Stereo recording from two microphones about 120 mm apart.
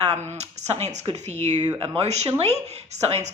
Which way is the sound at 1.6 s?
50° right (ahead or behind).